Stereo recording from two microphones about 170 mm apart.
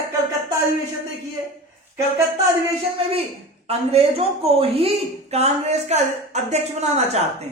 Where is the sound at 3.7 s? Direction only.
35° right (ahead or behind).